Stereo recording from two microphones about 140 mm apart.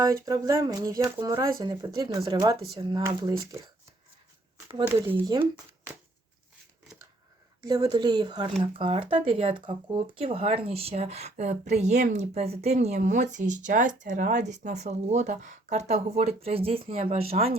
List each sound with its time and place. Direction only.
0.0 s speech: 25° right (ahead or behind)
4.9 s speech: 15° right (ahead or behind)
5.2 s speech: 30° right (ahead or behind)
7.6 s speech: 30° right (ahead or behind); by 17.6 s 45° right (ahead or behind)